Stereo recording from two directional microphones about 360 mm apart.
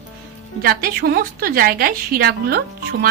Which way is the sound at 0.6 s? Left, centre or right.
Right.